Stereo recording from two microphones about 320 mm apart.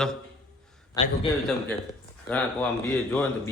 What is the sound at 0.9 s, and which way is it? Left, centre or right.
Speech, centre.